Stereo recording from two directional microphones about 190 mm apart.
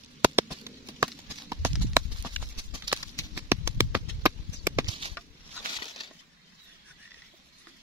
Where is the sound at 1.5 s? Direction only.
15° right (ahead or behind).